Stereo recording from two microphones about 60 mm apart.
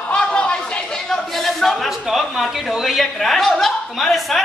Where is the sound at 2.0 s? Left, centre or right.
Centre.